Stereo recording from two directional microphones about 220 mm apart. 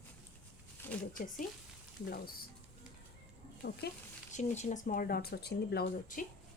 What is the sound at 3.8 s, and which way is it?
Speech, 45° left (ahead or behind).